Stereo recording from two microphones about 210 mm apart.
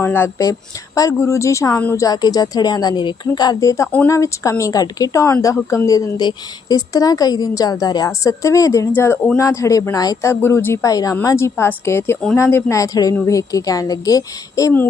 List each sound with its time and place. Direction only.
0.0 s speech: 10° left (ahead or behind)